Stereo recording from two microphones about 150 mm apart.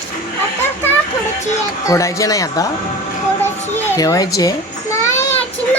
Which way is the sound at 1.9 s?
20° left (ahead or behind).